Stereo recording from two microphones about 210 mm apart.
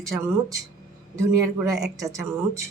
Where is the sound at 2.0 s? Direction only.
15° right (ahead or behind).